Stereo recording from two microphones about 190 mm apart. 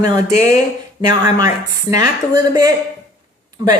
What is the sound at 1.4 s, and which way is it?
Speech, 20° right (ahead or behind).